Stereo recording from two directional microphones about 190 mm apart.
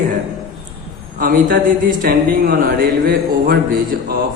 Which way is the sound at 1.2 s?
45° right (ahead or behind).